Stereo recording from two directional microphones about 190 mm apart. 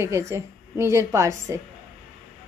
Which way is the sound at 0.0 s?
15° right (ahead or behind).